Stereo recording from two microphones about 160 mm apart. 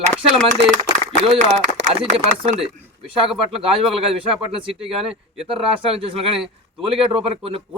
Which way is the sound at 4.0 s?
35° right (ahead or behind).